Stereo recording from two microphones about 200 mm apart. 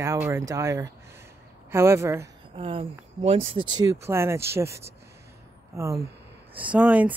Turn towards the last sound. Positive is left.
turn(degrees=-5)  # may be behind; listen again after turning